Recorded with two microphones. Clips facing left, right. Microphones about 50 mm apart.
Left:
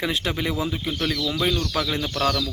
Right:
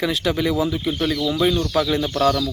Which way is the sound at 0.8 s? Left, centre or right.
Centre.